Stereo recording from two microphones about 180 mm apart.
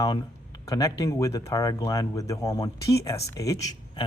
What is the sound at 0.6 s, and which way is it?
Speech, 20° left (ahead or behind).